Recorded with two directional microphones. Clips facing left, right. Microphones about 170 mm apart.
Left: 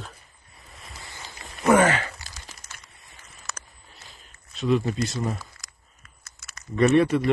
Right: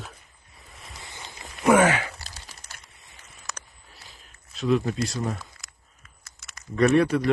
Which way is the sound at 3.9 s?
Centre (ahead or behind).